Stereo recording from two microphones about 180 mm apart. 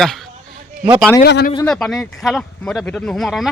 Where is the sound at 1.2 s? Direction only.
65° left (ahead or behind).